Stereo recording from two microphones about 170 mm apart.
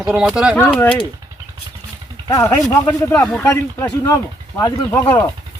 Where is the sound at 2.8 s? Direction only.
10° left (ahead or behind).